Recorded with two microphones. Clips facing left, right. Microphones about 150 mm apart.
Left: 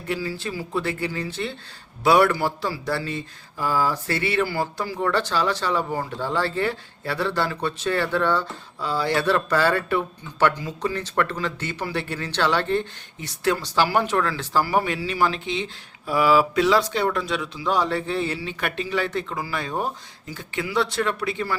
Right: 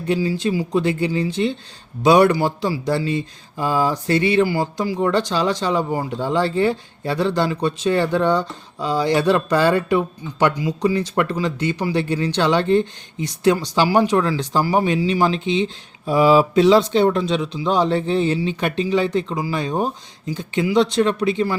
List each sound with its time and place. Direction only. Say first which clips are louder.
0.1 s speech: right 8 dB; 15° right (ahead or behind)